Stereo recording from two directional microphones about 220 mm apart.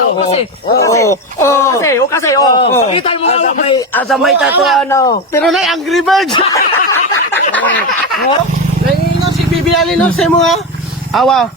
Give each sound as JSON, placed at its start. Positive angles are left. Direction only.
{"t": 0.2, "sound": "speech", "side_deg": 25}
{"t": 0.8, "sound": "speech", "side_deg": 15}
{"t": 4.1, "sound": "speech", "side_deg": 0}
{"t": 4.9, "sound": "speech", "side_deg": 15}
{"t": 5.4, "sound": "speech", "side_deg": 0}
{"t": 6.3, "sound": "speech", "side_deg": 15}
{"t": 9.6, "sound": "speech", "side_deg": 0}